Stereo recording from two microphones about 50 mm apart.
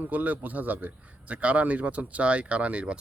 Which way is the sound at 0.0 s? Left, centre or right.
Right.